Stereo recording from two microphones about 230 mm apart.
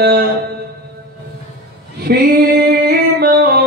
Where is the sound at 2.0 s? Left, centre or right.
Right.